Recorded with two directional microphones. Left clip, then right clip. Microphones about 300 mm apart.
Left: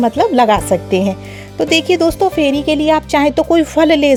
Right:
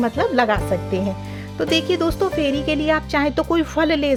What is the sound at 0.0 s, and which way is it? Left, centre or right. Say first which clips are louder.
A woman's voice: left 7 dB; centre.